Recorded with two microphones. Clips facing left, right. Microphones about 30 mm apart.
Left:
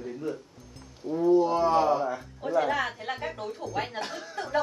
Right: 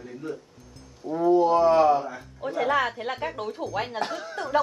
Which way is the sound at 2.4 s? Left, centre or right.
Right.